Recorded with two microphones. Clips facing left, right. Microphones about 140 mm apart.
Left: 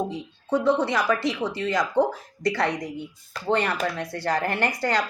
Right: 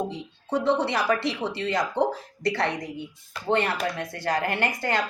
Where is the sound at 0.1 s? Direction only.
25° right (ahead or behind).